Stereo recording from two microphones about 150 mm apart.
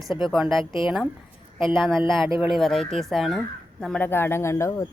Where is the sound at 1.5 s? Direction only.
35° left (ahead or behind).